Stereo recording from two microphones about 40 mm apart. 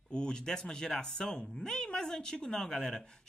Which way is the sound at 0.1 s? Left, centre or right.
Centre.